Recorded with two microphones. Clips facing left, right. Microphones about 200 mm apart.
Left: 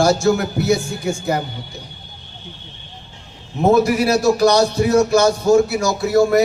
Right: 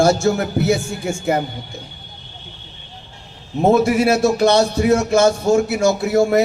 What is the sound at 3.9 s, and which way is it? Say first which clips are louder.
Speech: even; 25° right (ahead or behind).